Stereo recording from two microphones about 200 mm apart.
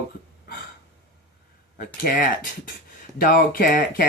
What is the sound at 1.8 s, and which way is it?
Speech, 45° left (ahead or behind).